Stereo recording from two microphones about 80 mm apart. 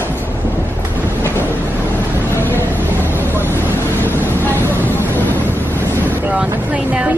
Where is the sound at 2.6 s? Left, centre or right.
Left.